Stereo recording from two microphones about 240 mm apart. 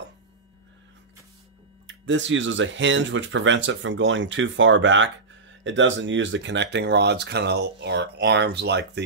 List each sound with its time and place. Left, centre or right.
1.9 s speech: right